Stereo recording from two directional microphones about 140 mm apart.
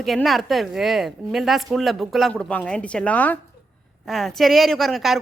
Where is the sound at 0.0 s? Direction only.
Centre (ahead or behind).